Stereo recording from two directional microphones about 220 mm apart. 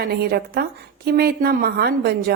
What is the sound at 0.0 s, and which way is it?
A woman's voice, 45° right (ahead or behind).